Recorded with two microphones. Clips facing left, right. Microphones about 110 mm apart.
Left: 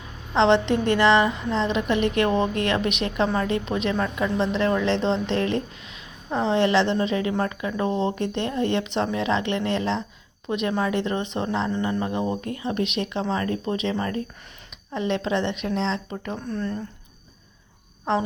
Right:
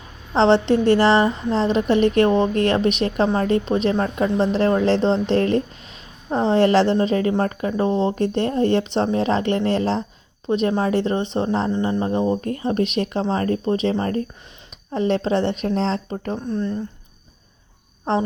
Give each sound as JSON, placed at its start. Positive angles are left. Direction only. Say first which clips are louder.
{"t": 0.3, "sound": "a woman's voice", "louder": "right 3 dB", "side_deg": -35}
{"t": 16.5, "sound": "a woman's voice", "louder": "right 4 dB", "side_deg": -20}
{"t": 18.1, "sound": "a woman's voice", "louder": "right 2 dB", "side_deg": -35}